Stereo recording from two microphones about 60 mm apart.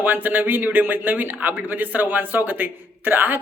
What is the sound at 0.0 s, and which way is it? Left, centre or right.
A man's voice, right.